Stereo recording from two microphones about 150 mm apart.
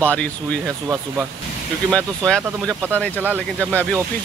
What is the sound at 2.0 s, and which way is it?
Speech, 5° left (ahead or behind).